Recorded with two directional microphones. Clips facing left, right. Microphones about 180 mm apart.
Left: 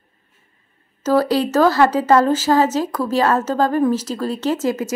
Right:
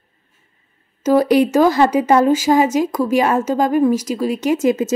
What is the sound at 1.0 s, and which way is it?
Speech, 15° right (ahead or behind).